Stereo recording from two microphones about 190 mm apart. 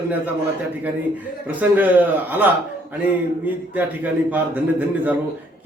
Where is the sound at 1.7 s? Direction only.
10° right (ahead or behind).